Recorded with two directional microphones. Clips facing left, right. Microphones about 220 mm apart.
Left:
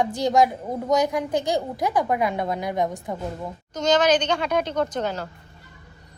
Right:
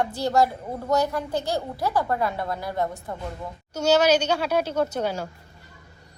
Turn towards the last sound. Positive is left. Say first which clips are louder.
# even
turn(degrees=-10)  # may be behind; listen again after turning